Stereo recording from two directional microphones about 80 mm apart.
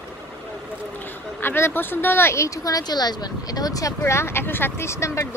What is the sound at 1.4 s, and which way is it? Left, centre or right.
Speech, left.